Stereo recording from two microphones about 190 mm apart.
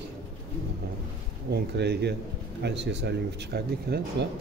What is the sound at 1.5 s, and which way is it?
Speech, 60° right (ahead or behind).